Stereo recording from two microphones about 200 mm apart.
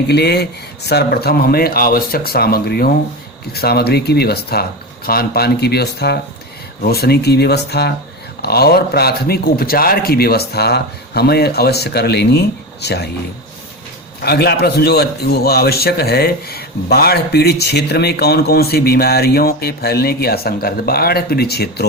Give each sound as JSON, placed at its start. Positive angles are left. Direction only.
{"t": 0.1, "sound": "a man's voice", "side_deg": 55}
{"t": 14.2, "sound": "a man's voice", "side_deg": 55}